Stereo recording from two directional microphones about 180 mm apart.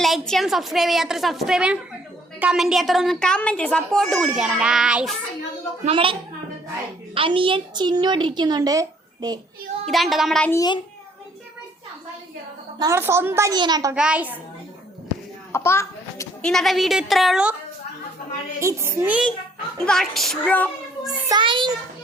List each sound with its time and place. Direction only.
0.0 s a woman's voice: centre (ahead or behind)
5.9 s a woman's voice: 30° right (ahead or behind)
9.8 s a woman's voice: centre (ahead or behind)
10.5 s a child's voice: 20° left (ahead or behind)
12.8 s a woman's voice: 15° right (ahead or behind)
13.9 s a woman's voice: 5° right (ahead or behind)
15.5 s a sound: 15° left (ahead or behind)
16.4 s a woman's voice: centre (ahead or behind)
18.6 s a woman's voice: 15° right (ahead or behind)
19.8 s a woman's voice: centre (ahead or behind)
21.2 s a woman's voice: 25° right (ahead or behind)